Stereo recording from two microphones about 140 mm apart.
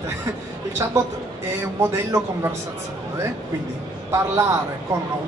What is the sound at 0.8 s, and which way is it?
A man's voice, 20° right (ahead or behind).